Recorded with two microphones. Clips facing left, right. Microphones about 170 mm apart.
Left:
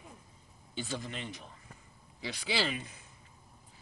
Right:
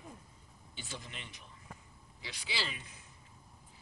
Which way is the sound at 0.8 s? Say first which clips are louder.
Left 9 dB; 35° left (ahead or behind).